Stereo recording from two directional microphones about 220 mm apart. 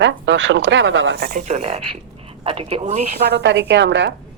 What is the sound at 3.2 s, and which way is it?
Speech, 50° right (ahead or behind).